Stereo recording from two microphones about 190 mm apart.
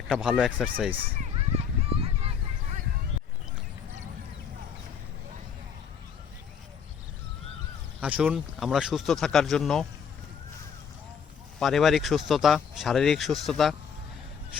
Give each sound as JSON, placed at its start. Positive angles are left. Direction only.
{"t": 0.1, "sound": "speech", "side_deg": -5}
{"t": 1.0, "sound": "a sound", "side_deg": -30}
{"t": 8.0, "sound": "speech", "side_deg": -5}
{"t": 11.6, "sound": "speech", "side_deg": 0}